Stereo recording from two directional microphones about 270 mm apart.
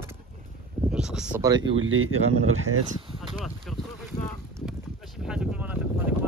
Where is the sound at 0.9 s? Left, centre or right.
Centre.